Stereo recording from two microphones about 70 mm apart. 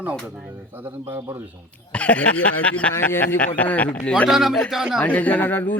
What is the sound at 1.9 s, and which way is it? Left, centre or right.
Speech, centre.